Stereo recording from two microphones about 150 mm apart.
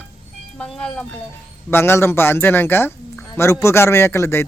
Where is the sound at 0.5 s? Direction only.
5° left (ahead or behind).